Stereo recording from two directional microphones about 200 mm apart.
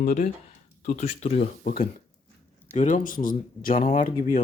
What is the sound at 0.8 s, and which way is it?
Speech, 35° left (ahead or behind).